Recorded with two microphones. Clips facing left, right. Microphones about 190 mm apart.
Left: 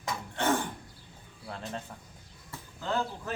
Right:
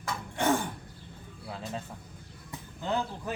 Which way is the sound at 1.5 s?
5° right (ahead or behind).